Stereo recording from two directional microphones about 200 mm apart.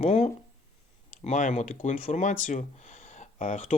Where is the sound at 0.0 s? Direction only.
35° left (ahead or behind).